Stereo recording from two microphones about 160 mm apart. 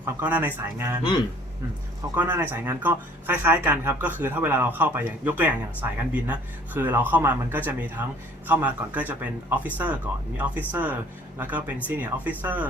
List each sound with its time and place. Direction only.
0.0 s speech: 10° right (ahead or behind)
2.1 s speech: 10° right (ahead or behind)